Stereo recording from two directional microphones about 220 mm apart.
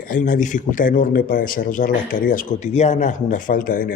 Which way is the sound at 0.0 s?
40° left (ahead or behind).